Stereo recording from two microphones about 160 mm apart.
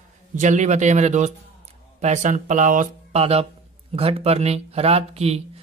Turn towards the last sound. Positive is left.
turn(degrees=-40)  # may be behind; listen again after turning